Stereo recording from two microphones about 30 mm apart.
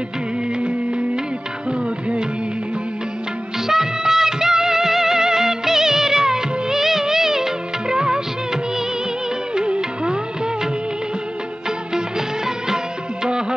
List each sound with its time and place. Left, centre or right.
0.6 s music: right
3.6 s music: centre
9.6 s music of bollywood: right
12.4 s music of bollywood: right